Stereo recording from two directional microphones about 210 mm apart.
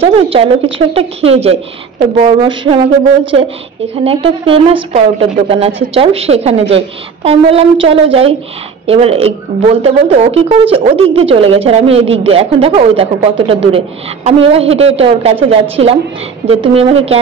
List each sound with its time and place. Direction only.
0.0 s speech: 25° right (ahead or behind)
4.0 s speech: 25° right (ahead or behind)